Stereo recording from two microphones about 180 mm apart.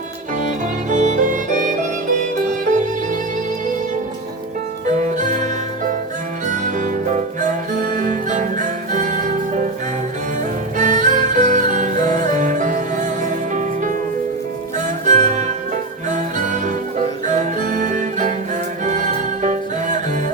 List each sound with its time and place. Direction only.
0.9 s music: 40° right (ahead or behind)
4.9 s music: 45° right (ahead or behind)
6.5 s music: 45° right (ahead or behind)
10.8 s music: 45° right (ahead or behind)